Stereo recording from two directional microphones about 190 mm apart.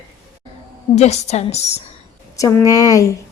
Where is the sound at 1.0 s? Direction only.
35° left (ahead or behind).